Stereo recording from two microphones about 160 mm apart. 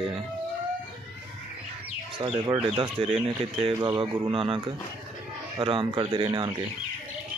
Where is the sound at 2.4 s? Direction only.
30° right (ahead or behind).